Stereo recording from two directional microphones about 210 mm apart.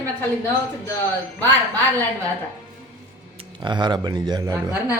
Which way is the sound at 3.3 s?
20° right (ahead or behind).